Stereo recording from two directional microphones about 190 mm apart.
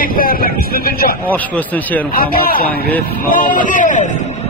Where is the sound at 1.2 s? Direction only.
10° left (ahead or behind).